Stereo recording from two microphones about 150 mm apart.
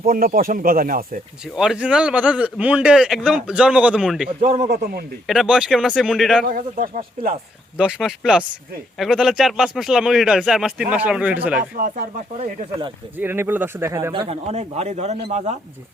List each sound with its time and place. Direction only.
0.0 s speech: 70° right (ahead or behind)
1.5 s a man's voice: 5° right (ahead or behind)
4.4 s speech: 55° right (ahead or behind); by 5.0 s 85° right
5.2 s a man's voice: centre (ahead or behind)
6.4 s speech: 65° right (ahead or behind)
7.8 s a man's voice: 5° right (ahead or behind)
13.1 s a man's voice: 15° right (ahead or behind)
14.1 s a man's voice: 40° right (ahead or behind)